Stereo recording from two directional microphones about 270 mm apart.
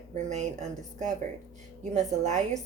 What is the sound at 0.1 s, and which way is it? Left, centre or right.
Speech, right.